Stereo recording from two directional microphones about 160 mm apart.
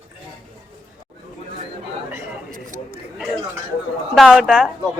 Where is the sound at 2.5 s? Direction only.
60° right (ahead or behind).